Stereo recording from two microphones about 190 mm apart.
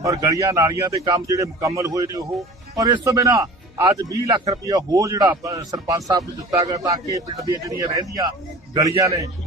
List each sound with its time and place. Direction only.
0.0 s a man's voice: 15° right (ahead or behind)